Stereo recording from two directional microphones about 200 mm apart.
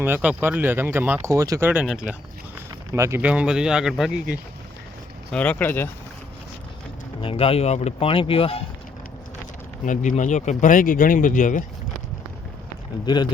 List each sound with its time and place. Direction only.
0.0 s speech: 10° right (ahead or behind)
5.3 s speech: 5° left (ahead or behind)
7.2 s speech: 30° left (ahead or behind)
9.8 s speech: 40° left (ahead or behind)